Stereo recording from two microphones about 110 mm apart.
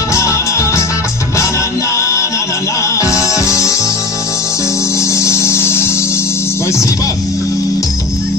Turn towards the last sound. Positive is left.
turn(degrees=25)  # may be behind; listen again after turning